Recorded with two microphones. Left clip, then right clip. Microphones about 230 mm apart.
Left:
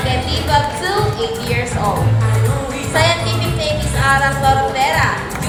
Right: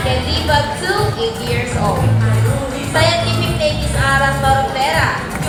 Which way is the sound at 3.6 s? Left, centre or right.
Left.